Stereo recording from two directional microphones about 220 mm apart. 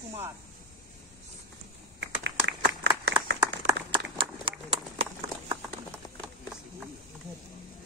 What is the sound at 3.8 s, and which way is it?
Run, 20° right (ahead or behind).